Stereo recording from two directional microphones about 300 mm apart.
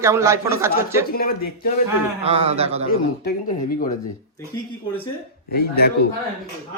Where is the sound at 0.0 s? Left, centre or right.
Centre.